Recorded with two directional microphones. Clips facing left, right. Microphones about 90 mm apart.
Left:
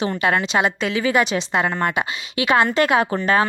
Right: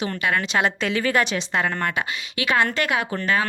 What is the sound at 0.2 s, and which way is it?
Speech, 30° left (ahead or behind).